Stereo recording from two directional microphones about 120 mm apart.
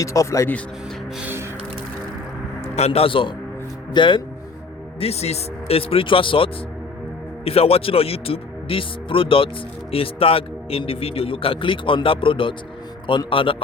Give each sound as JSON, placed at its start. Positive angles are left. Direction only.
{"t": 0.0, "sound": "a man's voice", "side_deg": 25}
{"t": 2.6, "sound": "a man's voice", "side_deg": 60}
{"t": 4.9, "sound": "a man's voice", "side_deg": 60}